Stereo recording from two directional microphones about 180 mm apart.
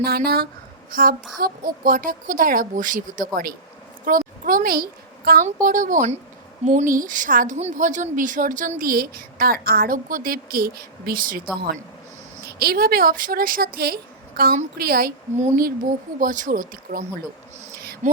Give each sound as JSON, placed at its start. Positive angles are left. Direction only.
{"t": 0.0, "sound": "a woman's voice", "side_deg": -60}
{"t": 0.9, "sound": "child singing", "side_deg": -50}
{"t": 1.4, "sound": "a woman's voice", "side_deg": -50}
{"t": 12.5, "sound": "a woman's voice", "side_deg": -60}
{"t": 18.0, "sound": "speech", "side_deg": -45}